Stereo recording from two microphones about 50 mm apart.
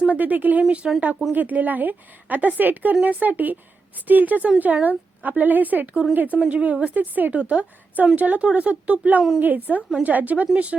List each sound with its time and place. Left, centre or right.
0.1 s a woman's voice: right
0.8 s speech: centre
1.3 s a woman's voice: right